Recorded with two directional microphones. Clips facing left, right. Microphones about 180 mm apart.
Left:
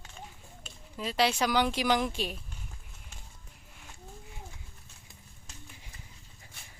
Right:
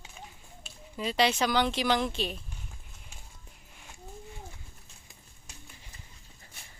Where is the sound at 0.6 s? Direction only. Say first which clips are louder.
Right 3 dB; centre (ahead or behind).